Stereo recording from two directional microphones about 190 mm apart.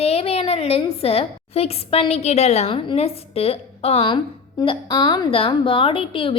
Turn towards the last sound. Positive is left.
turn(degrees=25)  # may be behind; listen again after turning